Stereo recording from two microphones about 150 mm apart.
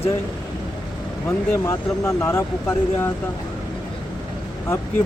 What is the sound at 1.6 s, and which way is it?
Speech, 20° left (ahead or behind).